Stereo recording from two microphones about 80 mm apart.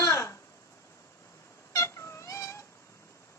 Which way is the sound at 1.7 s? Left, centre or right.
Left.